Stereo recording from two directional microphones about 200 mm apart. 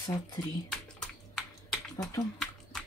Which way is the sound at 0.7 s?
5° left (ahead or behind).